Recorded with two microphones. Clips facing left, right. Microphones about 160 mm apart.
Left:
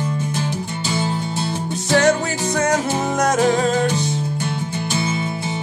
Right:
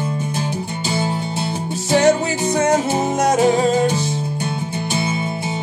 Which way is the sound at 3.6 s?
40° right (ahead or behind).